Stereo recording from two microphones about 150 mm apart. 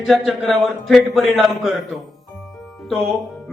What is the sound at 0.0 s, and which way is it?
A man's voice, centre (ahead or behind).